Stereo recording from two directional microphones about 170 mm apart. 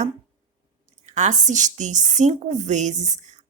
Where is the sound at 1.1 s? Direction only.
45° right (ahead or behind).